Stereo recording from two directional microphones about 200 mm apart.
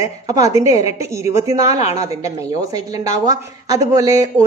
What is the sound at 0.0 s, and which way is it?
Speech, 15° right (ahead or behind).